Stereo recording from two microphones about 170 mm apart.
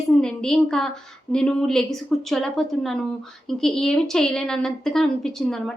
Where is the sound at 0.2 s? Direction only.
5° left (ahead or behind).